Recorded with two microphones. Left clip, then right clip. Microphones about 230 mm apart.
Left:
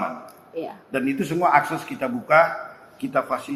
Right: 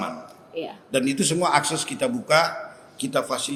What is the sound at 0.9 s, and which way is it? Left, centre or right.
A man's voice, right.